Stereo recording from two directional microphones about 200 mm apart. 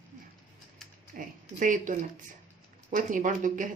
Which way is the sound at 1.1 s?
40° right (ahead or behind).